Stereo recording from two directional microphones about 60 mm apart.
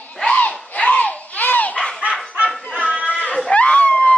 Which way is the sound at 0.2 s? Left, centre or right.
Left.